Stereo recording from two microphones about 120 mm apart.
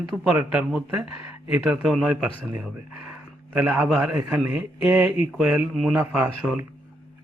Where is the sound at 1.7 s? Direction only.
10° right (ahead or behind).